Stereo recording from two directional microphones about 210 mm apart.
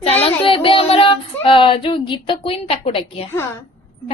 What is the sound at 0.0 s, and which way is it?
Child singing, 30° left (ahead or behind).